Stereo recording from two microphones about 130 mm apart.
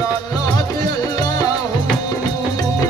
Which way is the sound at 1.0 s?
30° left (ahead or behind).